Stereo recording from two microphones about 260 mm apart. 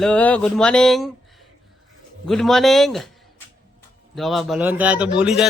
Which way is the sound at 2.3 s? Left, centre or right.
Centre.